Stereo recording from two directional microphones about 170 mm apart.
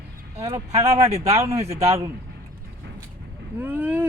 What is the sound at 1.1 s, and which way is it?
Speech, 35° right (ahead or behind).